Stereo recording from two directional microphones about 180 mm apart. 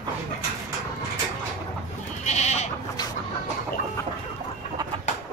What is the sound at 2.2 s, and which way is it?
Goat, 40° left (ahead or behind).